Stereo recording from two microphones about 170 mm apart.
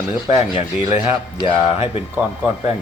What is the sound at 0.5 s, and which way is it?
Speech, 35° left (ahead or behind).